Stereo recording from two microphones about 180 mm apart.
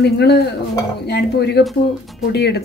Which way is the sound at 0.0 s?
65° left (ahead or behind).